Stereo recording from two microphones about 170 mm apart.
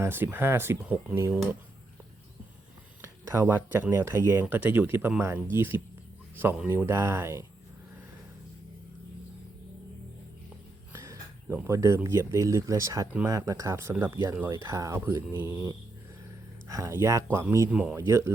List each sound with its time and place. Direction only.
0.0 s speech: 10° right (ahead or behind)
3.0 s speech: 15° right (ahead or behind)
10.9 s speech: 15° right (ahead or behind)